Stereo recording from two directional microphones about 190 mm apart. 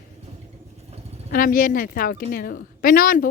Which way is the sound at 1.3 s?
45° left (ahead or behind).